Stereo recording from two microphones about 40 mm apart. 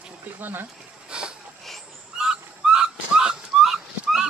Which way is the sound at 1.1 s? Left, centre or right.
Right.